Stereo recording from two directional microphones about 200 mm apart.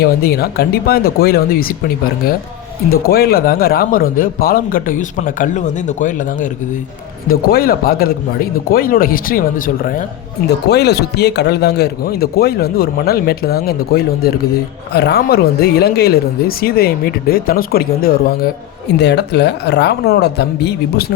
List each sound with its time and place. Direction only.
0.0 s speech: 50° left (ahead or behind)
3.1 s speech: 50° left (ahead or behind)
10.7 s speech: 55° left (ahead or behind)